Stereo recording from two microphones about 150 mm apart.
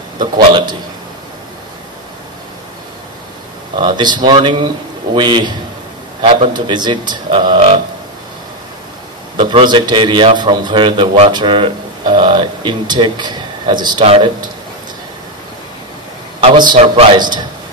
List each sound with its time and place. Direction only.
0.2 s a man's voice: 30° right (ahead or behind)
3.7 s a man's voice: 30° right (ahead or behind)
9.4 s a man's voice: 35° right (ahead or behind)
16.3 s a man's voice: 35° right (ahead or behind)